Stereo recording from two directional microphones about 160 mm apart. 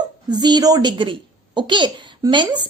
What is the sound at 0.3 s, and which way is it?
A woman's voice, 25° right (ahead or behind).